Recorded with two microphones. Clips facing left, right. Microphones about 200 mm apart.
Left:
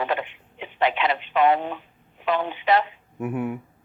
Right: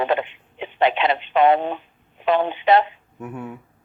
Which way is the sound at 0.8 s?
25° right (ahead or behind).